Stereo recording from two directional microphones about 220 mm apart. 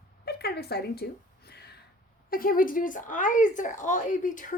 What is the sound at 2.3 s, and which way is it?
Speech, 40° left (ahead or behind).